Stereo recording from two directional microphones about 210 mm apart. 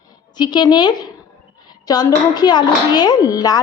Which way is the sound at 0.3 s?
20° left (ahead or behind).